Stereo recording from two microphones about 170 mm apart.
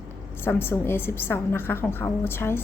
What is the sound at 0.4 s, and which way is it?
A woman's voice, 15° left (ahead or behind).